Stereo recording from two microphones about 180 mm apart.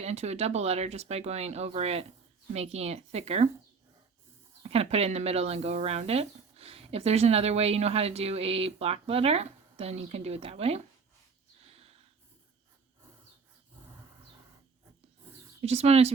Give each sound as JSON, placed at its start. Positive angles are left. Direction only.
{"t": 0.0, "sound": "speech", "side_deg": -35}
{"t": 4.6, "sound": "speech", "side_deg": -35}
{"t": 15.6, "sound": "speech", "side_deg": -35}